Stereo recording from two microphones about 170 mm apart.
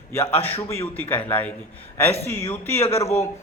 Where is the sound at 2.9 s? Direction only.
15° left (ahead or behind).